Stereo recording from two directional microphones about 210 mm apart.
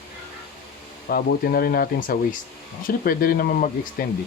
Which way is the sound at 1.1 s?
45° left (ahead or behind).